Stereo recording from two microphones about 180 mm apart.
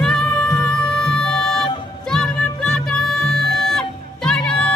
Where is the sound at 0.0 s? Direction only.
5° left (ahead or behind).